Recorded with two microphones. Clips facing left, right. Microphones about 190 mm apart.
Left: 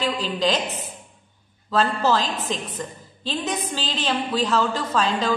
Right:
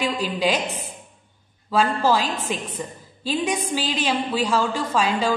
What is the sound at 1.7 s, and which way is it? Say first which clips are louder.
A woman's voice: right 1 dB; 10° right (ahead or behind).